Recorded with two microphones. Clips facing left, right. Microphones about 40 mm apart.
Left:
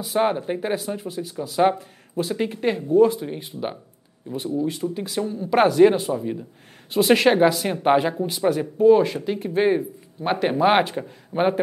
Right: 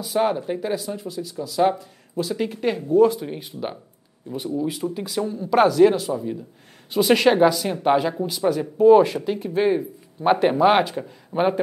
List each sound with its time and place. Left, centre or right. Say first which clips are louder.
0.0 s speech: even; centre
2.3 s speech: even; centre
4.3 s speech: left 1 dB; centre
4.9 s speech: even; centre
6.9 s speech: even; centre
8.8 s speech: right 2 dB; centre
9.4 s speech: left 1 dB; centre
10.2 s speech: right 3 dB; centre